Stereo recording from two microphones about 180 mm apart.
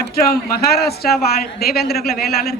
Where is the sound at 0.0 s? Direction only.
60° left (ahead or behind).